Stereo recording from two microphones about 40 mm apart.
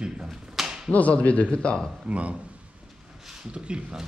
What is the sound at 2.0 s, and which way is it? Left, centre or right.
Speech, right.